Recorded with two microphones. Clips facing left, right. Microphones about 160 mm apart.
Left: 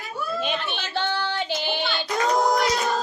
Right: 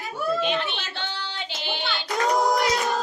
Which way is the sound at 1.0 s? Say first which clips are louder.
Left 10 dB; 55° left (ahead or behind).